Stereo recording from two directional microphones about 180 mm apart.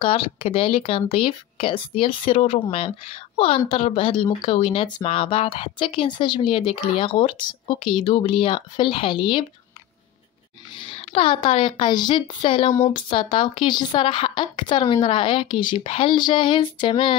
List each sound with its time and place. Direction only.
0.0 s speech: 30° left (ahead or behind)
10.9 s speech: 30° left (ahead or behind)